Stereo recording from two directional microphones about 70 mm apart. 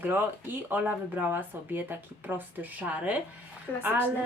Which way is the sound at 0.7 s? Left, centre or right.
Right.